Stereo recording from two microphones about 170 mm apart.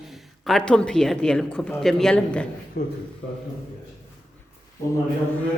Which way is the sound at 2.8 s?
60° left (ahead or behind).